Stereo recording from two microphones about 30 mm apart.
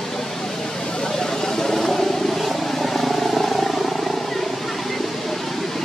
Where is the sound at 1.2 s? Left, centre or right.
Centre.